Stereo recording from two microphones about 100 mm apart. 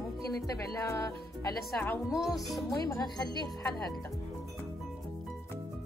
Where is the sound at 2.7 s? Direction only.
40° left (ahead or behind).